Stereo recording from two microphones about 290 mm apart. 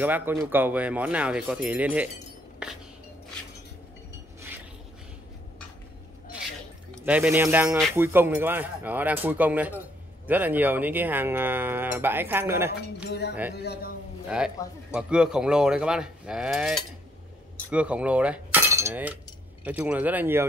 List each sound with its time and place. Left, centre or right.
0.0 s speech: centre
2.6 s a sound: centre
7.0 s speech: centre
13.6 s a man's voice: left
14.3 s speech: centre